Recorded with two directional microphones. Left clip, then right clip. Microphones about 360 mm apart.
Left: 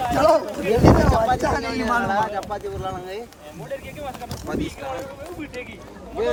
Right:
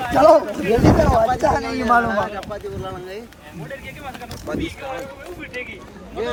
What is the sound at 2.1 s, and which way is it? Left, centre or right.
Speech, centre.